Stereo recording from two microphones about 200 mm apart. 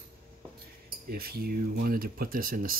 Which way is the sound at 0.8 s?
45° right (ahead or behind).